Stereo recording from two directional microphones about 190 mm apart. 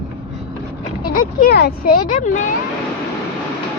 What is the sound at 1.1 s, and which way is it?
Speech, 55° left (ahead or behind).